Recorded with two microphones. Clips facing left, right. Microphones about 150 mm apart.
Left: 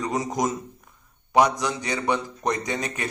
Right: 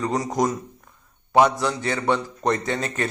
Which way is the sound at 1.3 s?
15° left (ahead or behind).